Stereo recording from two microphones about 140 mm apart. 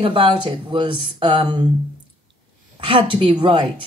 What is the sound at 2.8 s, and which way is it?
Speech, 35° right (ahead or behind).